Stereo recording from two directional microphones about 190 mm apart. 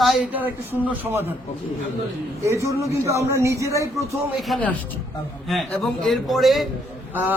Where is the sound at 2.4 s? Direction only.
15° right (ahead or behind).